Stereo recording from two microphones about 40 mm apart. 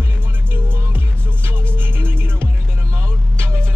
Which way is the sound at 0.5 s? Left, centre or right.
Right.